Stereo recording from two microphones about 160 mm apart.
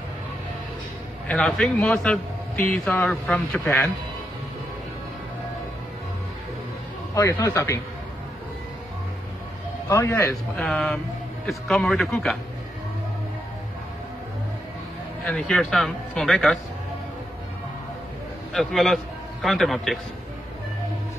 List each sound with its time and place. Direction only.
1.2 s a man's voice: 5° left (ahead or behind)
7.2 s a man's voice: 20° left (ahead or behind)
9.8 s a man's voice: 15° left (ahead or behind)
15.2 s speech: 5° left (ahead or behind)
18.5 s speech: centre (ahead or behind)